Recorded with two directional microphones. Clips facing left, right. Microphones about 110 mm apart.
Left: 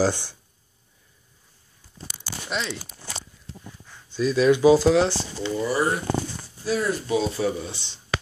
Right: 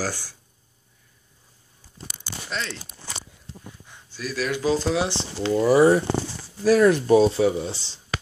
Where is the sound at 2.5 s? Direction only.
20° left (ahead or behind).